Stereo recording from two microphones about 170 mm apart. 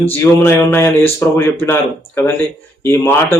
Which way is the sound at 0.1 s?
15° left (ahead or behind).